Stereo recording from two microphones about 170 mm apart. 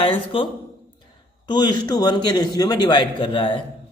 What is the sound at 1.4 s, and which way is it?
A man's voice, 25° left (ahead or behind).